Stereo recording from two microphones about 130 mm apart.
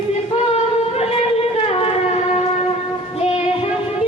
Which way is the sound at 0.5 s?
50° left (ahead or behind).